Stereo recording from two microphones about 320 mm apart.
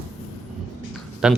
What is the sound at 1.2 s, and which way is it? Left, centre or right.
Speech, centre.